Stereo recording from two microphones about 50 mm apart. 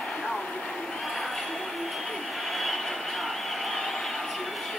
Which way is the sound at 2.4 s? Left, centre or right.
Centre.